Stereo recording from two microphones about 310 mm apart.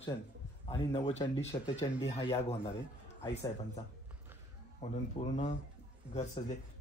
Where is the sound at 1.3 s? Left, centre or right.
Left.